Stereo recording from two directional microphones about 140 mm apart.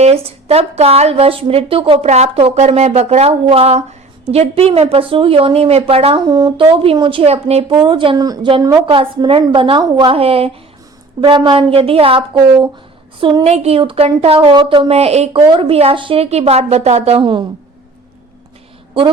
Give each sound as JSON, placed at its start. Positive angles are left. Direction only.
{"t": 0.0, "sound": "speech", "side_deg": -50}
{"t": 6.2, "sound": "a woman's voice", "side_deg": -30}
{"t": 6.7, "sound": "a woman's voice", "side_deg": -40}
{"t": 11.2, "sound": "a woman's voice", "side_deg": -35}
{"t": 15.4, "sound": "speech", "side_deg": -35}